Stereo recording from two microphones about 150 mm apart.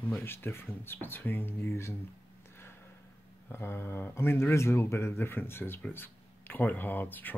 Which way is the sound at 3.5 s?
15° left (ahead or behind).